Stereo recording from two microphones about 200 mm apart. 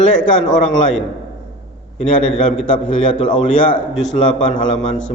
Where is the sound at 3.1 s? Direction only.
25° left (ahead or behind).